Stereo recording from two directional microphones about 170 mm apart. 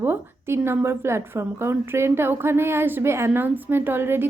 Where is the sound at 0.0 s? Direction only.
15° right (ahead or behind).